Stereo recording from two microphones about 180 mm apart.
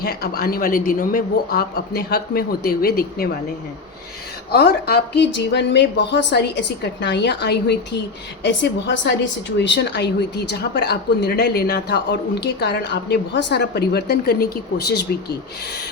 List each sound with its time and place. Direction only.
0.0 s a man's voice: 60° left (ahead or behind)
4.5 s a woman's voice: 60° left (ahead or behind)